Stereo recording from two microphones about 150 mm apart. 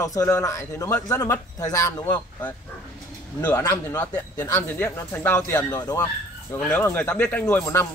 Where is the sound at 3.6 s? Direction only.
20° left (ahead or behind).